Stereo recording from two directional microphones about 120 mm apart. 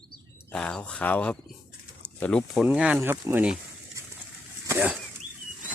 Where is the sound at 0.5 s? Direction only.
10° left (ahead or behind).